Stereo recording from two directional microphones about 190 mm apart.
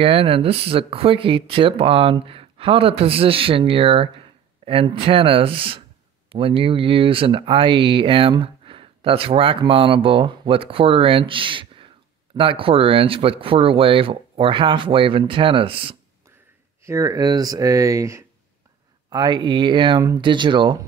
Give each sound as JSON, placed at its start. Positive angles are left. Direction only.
{"t": 0.0, "sound": "speech", "side_deg": -30}
{"t": 16.8, "sound": "speech", "side_deg": -15}